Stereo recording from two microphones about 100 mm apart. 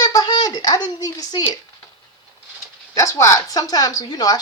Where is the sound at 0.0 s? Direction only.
40° left (ahead or behind).